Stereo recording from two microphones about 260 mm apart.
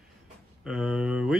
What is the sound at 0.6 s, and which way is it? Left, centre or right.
Speech, centre.